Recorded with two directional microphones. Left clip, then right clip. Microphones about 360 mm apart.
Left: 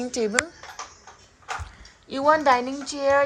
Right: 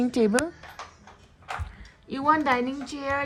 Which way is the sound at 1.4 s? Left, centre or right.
Centre.